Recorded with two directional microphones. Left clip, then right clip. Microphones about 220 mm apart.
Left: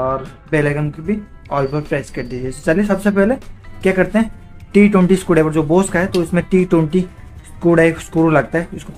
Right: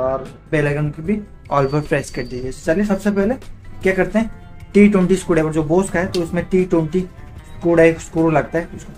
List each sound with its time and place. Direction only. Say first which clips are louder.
0.5 s speech: left 2 dB; 15° left (ahead or behind)
1.5 s speech: right 1 dB; 5° right (ahead or behind)
2.6 s speech: left 3 dB; 35° left (ahead or behind)